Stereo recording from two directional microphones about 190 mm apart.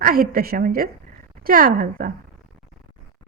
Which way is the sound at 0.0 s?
50° right (ahead or behind).